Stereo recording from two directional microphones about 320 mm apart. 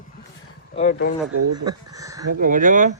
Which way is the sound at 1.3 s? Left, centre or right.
Right.